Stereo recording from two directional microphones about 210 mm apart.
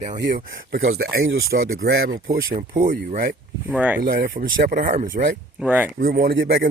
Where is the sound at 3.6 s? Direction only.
5° right (ahead or behind).